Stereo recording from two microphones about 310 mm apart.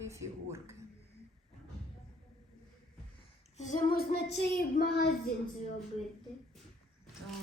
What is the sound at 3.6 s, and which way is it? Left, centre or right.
Child singing, left.